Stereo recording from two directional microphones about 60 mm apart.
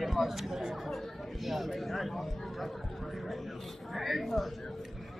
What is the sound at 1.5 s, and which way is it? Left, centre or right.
Speech, centre.